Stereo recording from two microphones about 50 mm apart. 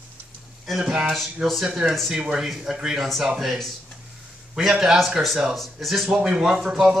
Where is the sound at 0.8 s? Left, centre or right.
Centre.